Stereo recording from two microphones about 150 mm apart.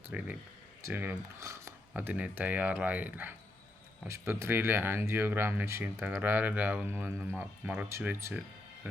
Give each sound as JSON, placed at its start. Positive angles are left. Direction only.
{"t": 0.1, "sound": "speech", "side_deg": -10}